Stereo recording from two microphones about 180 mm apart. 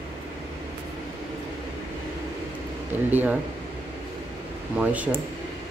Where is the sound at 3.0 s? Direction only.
10° right (ahead or behind).